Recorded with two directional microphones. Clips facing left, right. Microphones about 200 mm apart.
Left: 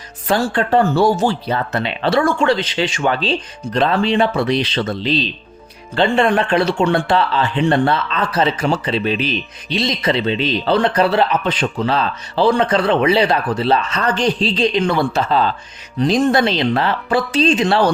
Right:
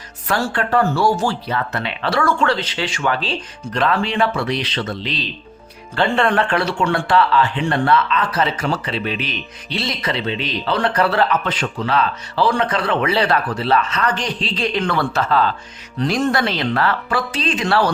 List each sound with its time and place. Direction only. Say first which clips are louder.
0.3 s speech: left 4 dB; 25° left (ahead or behind)
6.0 s speech: left 2 dB; 15° left (ahead or behind)
9.6 s speech: left 5 dB; 20° left (ahead or behind)
14.8 s speech: left 2 dB; 15° left (ahead or behind)